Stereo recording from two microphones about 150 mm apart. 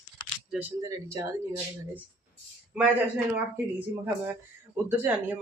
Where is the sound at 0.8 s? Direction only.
20° right (ahead or behind).